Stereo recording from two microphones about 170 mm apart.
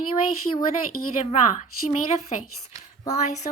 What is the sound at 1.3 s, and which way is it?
Speech, 45° left (ahead or behind).